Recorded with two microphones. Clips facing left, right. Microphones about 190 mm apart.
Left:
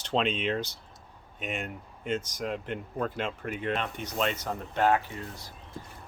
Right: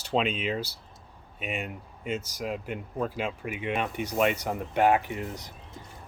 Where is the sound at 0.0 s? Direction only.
5° right (ahead or behind).